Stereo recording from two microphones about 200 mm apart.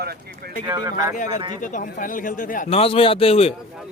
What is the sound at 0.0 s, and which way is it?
Speech, 50° right (ahead or behind).